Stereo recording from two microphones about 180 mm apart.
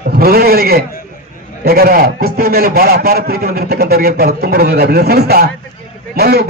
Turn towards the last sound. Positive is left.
turn(degrees=-60)  # may be behind; listen again after turning